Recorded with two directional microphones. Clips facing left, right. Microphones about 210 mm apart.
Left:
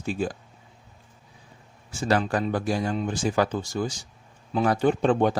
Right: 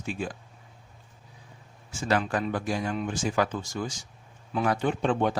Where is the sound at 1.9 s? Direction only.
35° left (ahead or behind).